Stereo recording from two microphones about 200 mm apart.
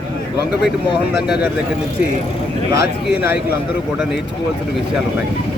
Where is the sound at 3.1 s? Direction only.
10° right (ahead or behind).